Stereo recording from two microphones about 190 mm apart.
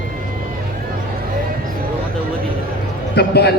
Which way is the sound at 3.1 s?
60° left (ahead or behind).